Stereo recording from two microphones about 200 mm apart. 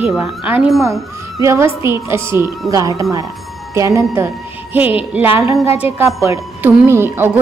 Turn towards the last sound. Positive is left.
turn(degrees=-10)  # may be behind; listen again after turning